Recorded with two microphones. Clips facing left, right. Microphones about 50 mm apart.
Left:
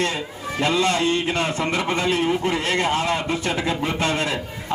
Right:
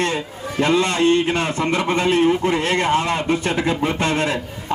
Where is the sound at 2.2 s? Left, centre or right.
Centre.